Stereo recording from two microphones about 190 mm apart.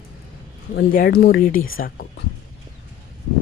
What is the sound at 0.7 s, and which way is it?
Speech, 50° left (ahead or behind).